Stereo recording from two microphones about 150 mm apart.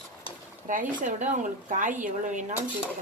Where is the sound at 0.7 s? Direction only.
60° right (ahead or behind).